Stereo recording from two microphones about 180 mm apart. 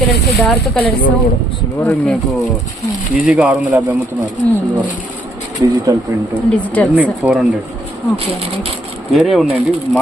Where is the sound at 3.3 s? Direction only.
5° right (ahead or behind).